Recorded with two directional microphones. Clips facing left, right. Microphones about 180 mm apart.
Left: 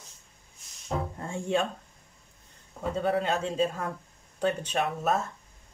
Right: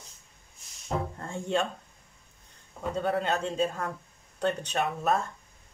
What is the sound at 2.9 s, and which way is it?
A man's voice, centre (ahead or behind).